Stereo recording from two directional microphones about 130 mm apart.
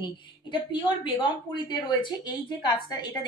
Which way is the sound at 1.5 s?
40° left (ahead or behind).